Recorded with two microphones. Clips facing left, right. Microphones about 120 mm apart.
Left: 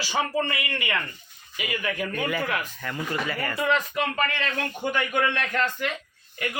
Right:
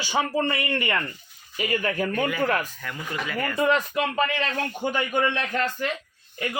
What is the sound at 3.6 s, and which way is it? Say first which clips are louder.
Speech: right 3 dB; 35° right (ahead or behind).